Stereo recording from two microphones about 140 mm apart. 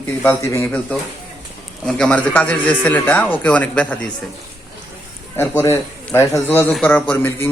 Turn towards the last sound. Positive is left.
turn(degrees=15)  # may be behind; listen again after turning